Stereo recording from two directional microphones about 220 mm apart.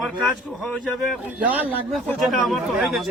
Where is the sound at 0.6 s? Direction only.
Centre (ahead or behind).